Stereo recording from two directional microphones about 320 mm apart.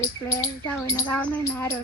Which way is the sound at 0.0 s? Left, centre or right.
Centre.